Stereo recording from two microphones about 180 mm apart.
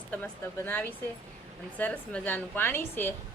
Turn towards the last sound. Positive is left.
turn(degrees=10)  # may be behind; listen again after turning